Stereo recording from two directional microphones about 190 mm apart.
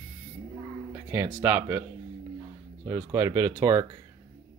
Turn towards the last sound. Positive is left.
turn(degrees=-15)  # may be behind; listen again after turning